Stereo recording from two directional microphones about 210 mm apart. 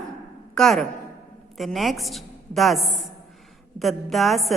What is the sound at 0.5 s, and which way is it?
A woman's voice, 5° left (ahead or behind).